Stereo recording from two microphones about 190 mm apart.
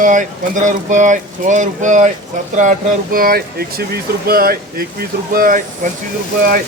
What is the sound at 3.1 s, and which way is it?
Speech, 50° right (ahead or behind).